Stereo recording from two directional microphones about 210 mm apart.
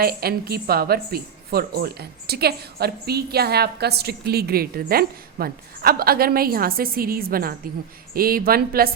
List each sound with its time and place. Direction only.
0.0 s a woman's voice: 45° right (ahead or behind)